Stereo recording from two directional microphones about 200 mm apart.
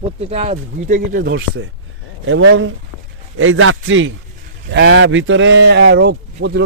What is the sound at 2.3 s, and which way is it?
Speech, 75° right (ahead or behind).